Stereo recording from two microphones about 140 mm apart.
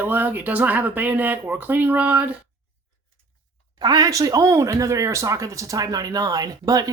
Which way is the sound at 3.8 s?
25° right (ahead or behind).